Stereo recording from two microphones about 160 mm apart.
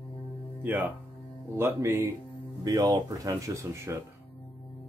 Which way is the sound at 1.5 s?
15° right (ahead or behind).